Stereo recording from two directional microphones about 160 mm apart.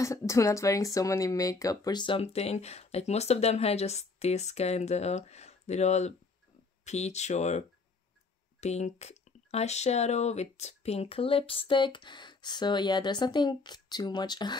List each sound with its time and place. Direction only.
0.0 s speech: 20° left (ahead or behind)